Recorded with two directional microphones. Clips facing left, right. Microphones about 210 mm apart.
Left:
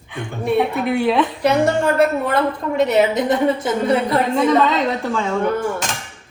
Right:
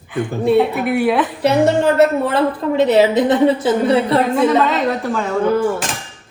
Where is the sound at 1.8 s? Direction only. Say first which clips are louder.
Right 3 dB; 25° right (ahead or behind).